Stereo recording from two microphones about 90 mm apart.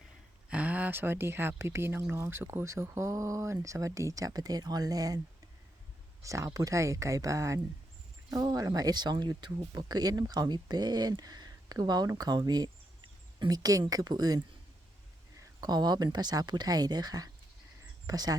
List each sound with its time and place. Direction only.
0.5 s speech: 15° right (ahead or behind); by 5.2 s 45° right (ahead or behind)
6.2 s speech: 35° right (ahead or behind)
15.6 s speech: 50° right (ahead or behind)